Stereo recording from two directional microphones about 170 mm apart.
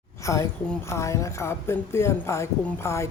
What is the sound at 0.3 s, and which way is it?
Speech, 15° left (ahead or behind).